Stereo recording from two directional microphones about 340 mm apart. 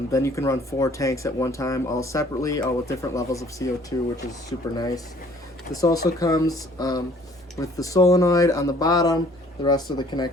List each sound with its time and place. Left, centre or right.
0.1 s speech: centre